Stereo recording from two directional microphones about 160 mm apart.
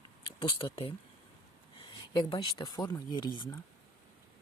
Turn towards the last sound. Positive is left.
turn(degrees=30)  # may be behind; listen again after turning